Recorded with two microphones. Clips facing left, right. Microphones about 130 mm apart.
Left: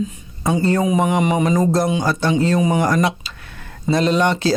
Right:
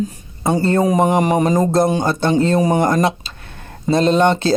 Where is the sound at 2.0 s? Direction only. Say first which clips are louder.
Right 2 dB; 25° right (ahead or behind).